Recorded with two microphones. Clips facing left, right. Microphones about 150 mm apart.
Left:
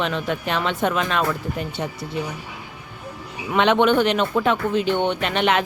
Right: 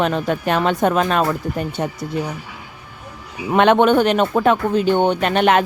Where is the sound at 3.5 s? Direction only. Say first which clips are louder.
Right 4 dB; 50° right (ahead or behind).